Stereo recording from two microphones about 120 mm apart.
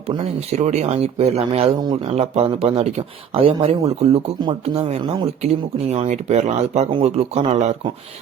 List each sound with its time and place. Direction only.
0.3 s speech: 65° right (ahead or behind)
5.9 s speech: 70° right (ahead or behind)